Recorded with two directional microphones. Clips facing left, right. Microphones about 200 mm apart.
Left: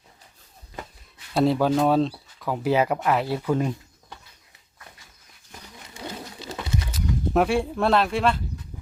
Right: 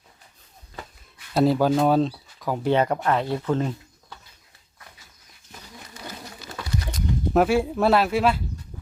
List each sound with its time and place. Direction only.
1.3 s speech: centre (ahead or behind)
6.0 s pigeon: 25° left (ahead or behind)
6.9 s speech: centre (ahead or behind)